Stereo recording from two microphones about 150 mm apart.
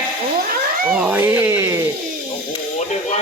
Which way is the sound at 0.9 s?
10° right (ahead or behind).